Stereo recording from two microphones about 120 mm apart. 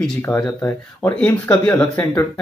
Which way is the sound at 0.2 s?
20° left (ahead or behind).